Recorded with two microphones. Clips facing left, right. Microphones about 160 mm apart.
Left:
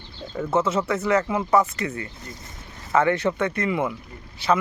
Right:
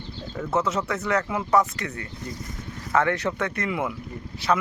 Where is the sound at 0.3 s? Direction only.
Centre (ahead or behind).